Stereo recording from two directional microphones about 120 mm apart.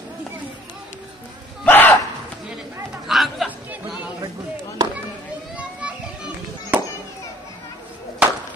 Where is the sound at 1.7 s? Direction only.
15° left (ahead or behind).